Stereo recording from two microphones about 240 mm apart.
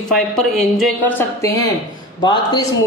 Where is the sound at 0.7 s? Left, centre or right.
Centre.